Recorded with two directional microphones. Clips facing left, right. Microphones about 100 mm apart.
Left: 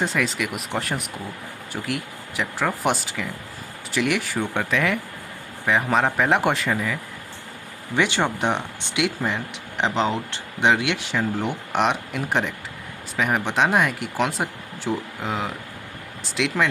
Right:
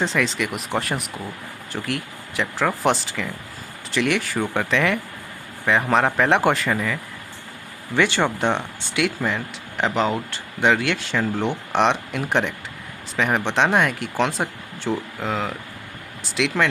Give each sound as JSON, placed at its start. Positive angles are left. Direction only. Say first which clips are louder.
{"t": 0.0, "sound": "speech", "louder": "right 2 dB", "side_deg": 5}
{"t": 7.9, "sound": "speech", "louder": "right 2 dB", "side_deg": 15}
{"t": 11.7, "sound": "speech", "louder": "right 2 dB", "side_deg": 5}
{"t": 16.3, "sound": "speech", "louder": "right 1 dB", "side_deg": 0}